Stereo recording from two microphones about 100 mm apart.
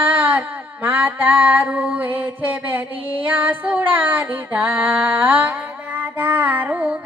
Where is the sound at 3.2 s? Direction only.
15° right (ahead or behind).